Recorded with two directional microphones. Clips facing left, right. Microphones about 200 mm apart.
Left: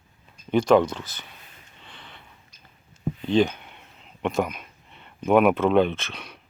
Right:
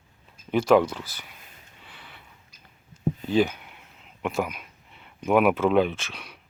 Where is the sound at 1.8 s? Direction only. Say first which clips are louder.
Left 2 dB; 5° right (ahead or behind).